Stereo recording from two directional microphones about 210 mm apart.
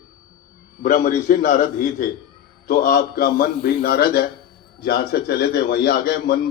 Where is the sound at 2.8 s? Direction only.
45° left (ahead or behind).